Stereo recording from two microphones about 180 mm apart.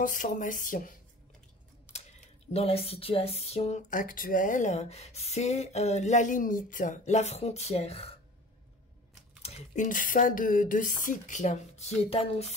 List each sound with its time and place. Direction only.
0.0 s speech: 45° left (ahead or behind)
9.4 s speech: 40° left (ahead or behind)